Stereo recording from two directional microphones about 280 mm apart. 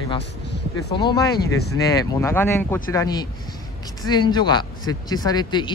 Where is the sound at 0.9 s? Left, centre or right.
Centre.